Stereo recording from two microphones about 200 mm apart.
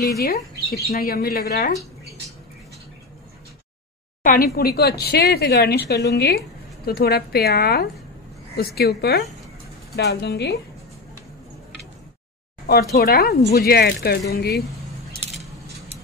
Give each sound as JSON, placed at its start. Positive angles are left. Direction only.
{"t": 0.2, "sound": "speech", "side_deg": 50}
{"t": 4.2, "sound": "a woman's voice", "side_deg": 45}
{"t": 12.9, "sound": "speech", "side_deg": 50}